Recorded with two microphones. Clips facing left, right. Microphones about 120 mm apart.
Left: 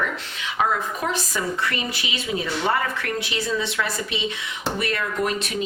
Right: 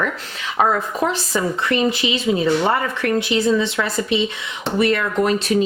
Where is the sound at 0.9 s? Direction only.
30° right (ahead or behind).